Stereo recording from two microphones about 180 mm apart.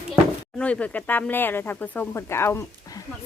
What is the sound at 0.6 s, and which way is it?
Speech, 5° left (ahead or behind).